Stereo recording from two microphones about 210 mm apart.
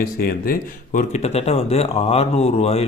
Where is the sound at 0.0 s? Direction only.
45° left (ahead or behind).